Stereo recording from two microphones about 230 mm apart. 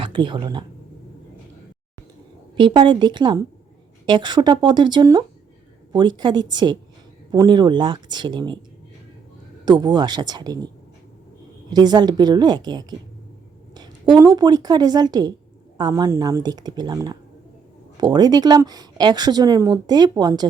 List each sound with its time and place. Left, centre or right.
0.0 s speech: right
2.6 s speech: right
9.6 s speech: centre
11.7 s speech: centre